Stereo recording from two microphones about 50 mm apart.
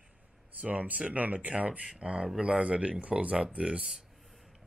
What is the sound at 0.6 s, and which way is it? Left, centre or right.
Speech, right.